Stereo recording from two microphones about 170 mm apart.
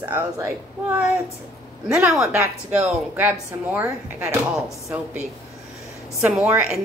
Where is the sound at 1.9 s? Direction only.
5° right (ahead or behind).